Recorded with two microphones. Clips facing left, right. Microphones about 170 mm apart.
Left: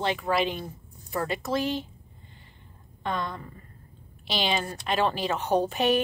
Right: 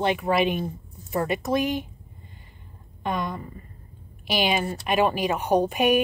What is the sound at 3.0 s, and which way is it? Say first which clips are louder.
Speech: right 3 dB; 15° right (ahead or behind).